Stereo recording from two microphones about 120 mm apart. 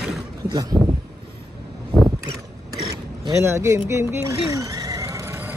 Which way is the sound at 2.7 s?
25° right (ahead or behind).